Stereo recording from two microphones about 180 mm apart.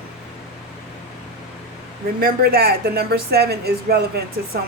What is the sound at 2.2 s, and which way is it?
Speech, 60° right (ahead or behind).